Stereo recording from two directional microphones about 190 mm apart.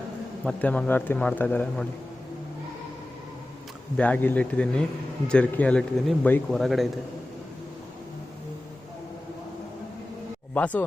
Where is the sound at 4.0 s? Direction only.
10° left (ahead or behind).